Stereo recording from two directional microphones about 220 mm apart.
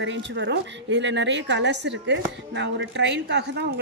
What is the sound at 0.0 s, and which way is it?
A woman's voice, 55° right (ahead or behind).